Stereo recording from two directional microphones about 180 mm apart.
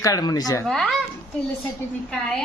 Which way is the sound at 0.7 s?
Centre (ahead or behind).